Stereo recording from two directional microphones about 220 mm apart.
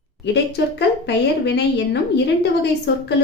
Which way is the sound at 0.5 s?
50° left (ahead or behind).